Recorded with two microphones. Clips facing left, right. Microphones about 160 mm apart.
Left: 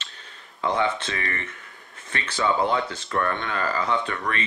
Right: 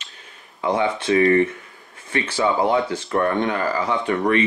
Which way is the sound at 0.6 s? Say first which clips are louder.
Right 4 dB; 15° right (ahead or behind).